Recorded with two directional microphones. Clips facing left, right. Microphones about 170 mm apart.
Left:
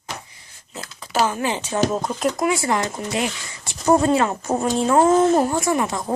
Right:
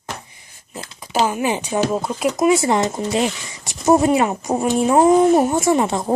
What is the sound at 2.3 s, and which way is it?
Speech, 20° right (ahead or behind).